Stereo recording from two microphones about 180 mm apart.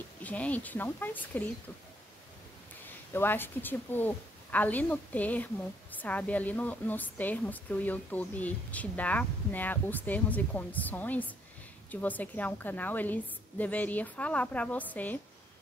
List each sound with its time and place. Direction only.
0.2 s a woman's voice: 10° left (ahead or behind)
3.1 s a woman's voice: 10° left (ahead or behind)